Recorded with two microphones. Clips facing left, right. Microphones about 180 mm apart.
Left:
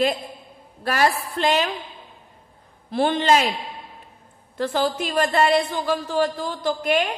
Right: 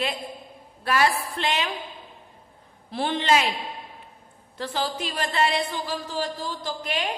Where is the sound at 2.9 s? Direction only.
50° left (ahead or behind).